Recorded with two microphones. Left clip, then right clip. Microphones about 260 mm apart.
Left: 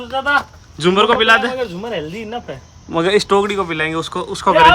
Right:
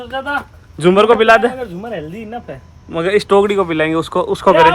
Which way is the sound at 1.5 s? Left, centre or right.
Left.